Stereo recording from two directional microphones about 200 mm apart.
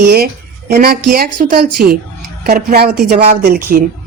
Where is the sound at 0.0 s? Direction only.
55° right (ahead or behind).